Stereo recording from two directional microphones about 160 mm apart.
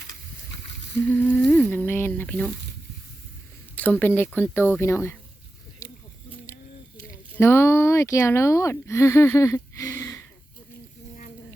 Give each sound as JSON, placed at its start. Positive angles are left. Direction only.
{"t": 1.1, "sound": "speech", "side_deg": 10}
{"t": 3.8, "sound": "speech", "side_deg": 10}
{"t": 5.8, "sound": "a sound", "side_deg": 20}
{"t": 7.1, "sound": "speech", "side_deg": 15}